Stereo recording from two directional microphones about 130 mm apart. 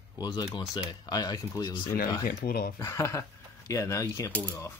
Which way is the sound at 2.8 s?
20° left (ahead or behind).